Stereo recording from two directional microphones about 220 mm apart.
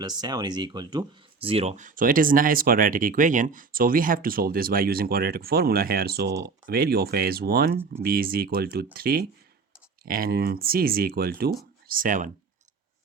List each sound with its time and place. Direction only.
0.0 s speech: 20° right (ahead or behind); by 12.3 s 35° right (ahead or behind)